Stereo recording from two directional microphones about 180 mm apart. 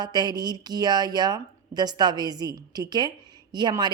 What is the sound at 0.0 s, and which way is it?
A woman's voice, 25° right (ahead or behind).